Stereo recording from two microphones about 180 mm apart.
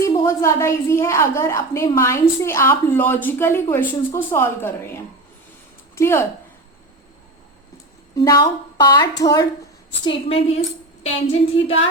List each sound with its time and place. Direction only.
0.0 s a woman's voice: 15° left (ahead or behind)
8.1 s a woman's voice: 20° left (ahead or behind)
10.0 s a woman's voice: 30° left (ahead or behind)